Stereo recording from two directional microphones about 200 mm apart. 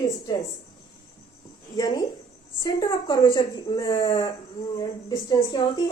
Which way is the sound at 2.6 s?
20° left (ahead or behind).